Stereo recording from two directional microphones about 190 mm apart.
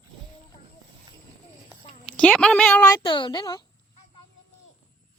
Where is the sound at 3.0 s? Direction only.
25° left (ahead or behind).